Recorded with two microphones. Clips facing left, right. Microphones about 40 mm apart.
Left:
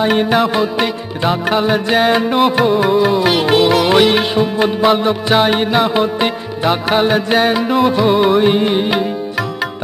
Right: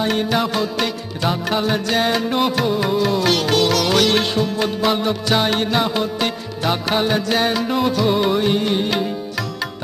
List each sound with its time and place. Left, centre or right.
0.0 s music: left